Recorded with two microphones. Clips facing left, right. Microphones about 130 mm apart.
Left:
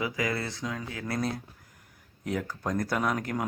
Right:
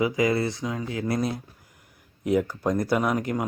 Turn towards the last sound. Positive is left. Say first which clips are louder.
# right 5 dB
turn(degrees=-5)  # may be behind; listen again after turning